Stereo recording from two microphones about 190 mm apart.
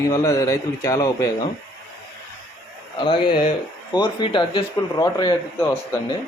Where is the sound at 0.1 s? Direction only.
15° left (ahead or behind).